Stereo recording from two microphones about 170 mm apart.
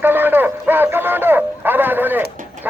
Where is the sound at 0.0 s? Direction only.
10° right (ahead or behind).